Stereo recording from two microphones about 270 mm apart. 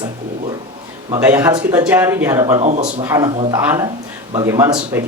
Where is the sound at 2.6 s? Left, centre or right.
Right.